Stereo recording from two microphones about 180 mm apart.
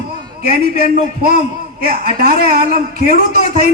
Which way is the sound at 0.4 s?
60° right (ahead or behind).